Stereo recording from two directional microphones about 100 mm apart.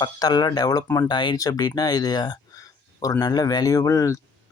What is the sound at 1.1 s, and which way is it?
Speech, 50° left (ahead or behind).